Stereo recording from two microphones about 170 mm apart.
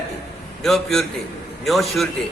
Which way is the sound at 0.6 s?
Centre (ahead or behind).